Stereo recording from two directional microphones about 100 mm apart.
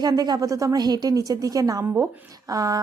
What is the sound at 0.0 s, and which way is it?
A woman's voice, 40° right (ahead or behind).